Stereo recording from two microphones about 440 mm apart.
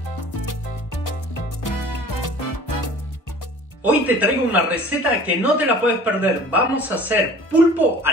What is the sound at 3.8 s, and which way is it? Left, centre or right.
A woman's voice, centre.